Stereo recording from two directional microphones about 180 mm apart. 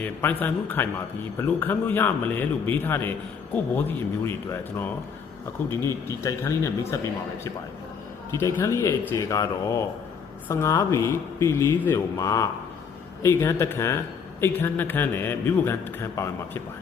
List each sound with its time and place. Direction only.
0.0 s a man's voice: 10° left (ahead or behind)
5.6 s a man's voice: 15° left (ahead or behind)
8.3 s a man's voice: 15° left (ahead or behind)